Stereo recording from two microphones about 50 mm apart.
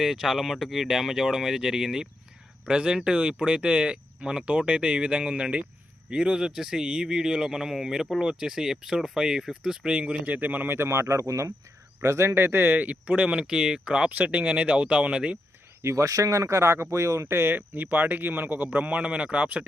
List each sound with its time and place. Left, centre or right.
0.0 s speech: centre; by 10.8 s right
10.8 s speech: right
12.0 s speech: right
13.5 s speech: centre
14.1 s speech: right
15.8 s speech: right
18.9 s speech: right